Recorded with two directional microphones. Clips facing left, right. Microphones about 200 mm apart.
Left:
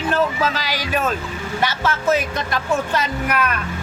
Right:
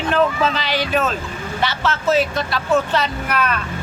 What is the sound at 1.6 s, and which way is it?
Speech, 15° left (ahead or behind).